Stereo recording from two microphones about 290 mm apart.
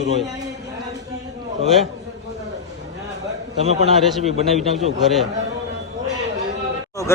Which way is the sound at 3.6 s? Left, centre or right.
Right.